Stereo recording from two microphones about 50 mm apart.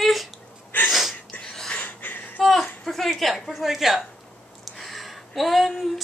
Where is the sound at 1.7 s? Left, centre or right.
Left.